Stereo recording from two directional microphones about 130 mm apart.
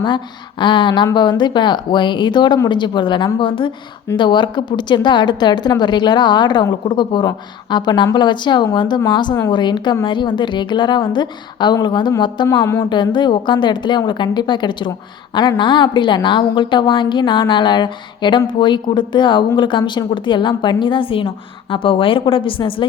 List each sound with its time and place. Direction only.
0.6 s a woman's voice: 35° left (ahead or behind)